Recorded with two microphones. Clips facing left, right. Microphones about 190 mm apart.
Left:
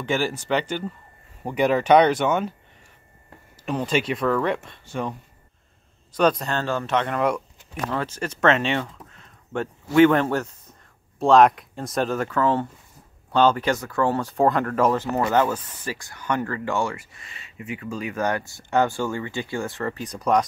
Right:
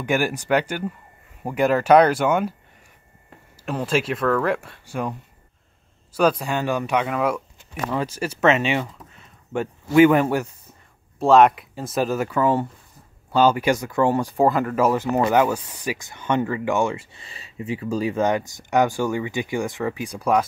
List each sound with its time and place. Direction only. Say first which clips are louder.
0.0 s speech: right 2 dB; 10° right (ahead or behind)
3.6 s speech: right 1 dB; 5° right (ahead or behind)
6.1 s speech: right 1 dB; 10° right (ahead or behind); by 18.2 s 35° right (ahead or behind)
18.2 s speech: right 4 dB; 20° right (ahead or behind)